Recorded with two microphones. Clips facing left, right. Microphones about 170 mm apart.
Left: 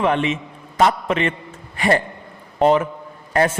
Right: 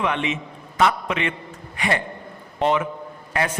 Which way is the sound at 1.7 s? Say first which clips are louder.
Left 6 dB; 40° left (ahead or behind).